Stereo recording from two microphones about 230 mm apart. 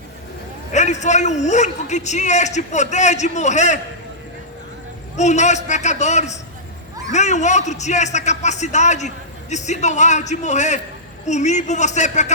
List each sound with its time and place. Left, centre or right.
0.7 s a man's voice: left
5.1 s a man's voice: left